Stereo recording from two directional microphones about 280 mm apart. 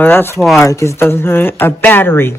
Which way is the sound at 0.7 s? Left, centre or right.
Centre.